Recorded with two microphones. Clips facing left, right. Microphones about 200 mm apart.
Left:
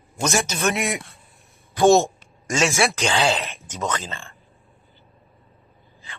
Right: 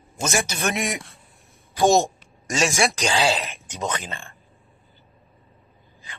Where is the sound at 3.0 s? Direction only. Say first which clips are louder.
Even; 30° right (ahead or behind).